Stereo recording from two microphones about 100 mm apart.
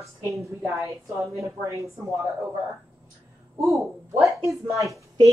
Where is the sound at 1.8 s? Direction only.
Centre (ahead or behind).